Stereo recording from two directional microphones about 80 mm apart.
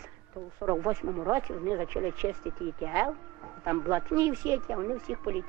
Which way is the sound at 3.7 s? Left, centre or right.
Right.